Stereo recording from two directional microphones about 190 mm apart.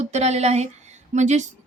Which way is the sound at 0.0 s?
35° right (ahead or behind).